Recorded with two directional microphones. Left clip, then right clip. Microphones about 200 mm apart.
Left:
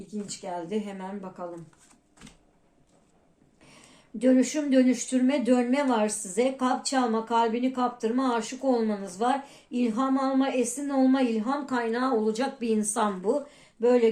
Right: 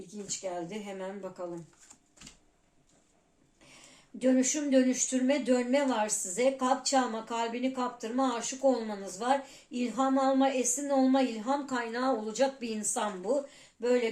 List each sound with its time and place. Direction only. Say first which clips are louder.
0.3 s speech: left 2 dB; 35° left (ahead or behind)
4.2 s speech: left 4 dB; 30° left (ahead or behind)